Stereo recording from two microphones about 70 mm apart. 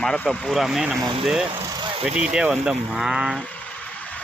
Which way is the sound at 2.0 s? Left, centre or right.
Centre.